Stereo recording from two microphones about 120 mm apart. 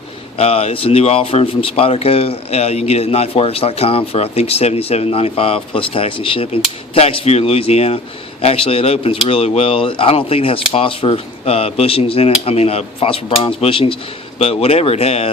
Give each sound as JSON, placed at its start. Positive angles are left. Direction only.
{"t": 0.3, "sound": "speech", "side_deg": 55}